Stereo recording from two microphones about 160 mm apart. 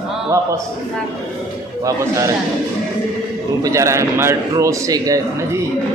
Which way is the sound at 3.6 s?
20° right (ahead or behind).